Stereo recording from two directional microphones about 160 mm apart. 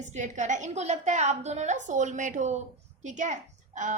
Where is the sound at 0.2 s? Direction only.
50° right (ahead or behind).